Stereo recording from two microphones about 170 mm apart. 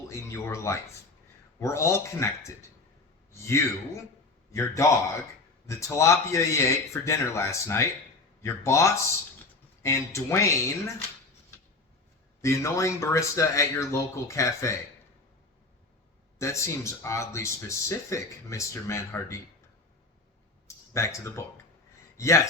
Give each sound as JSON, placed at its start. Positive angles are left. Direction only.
{"t": 0.1, "sound": "speech", "side_deg": 15}
{"t": 12.4, "sound": "speech", "side_deg": 15}
{"t": 16.4, "sound": "speech", "side_deg": 15}
{"t": 20.7, "sound": "a sound", "side_deg": 15}
{"t": 22.2, "sound": "speech", "side_deg": 15}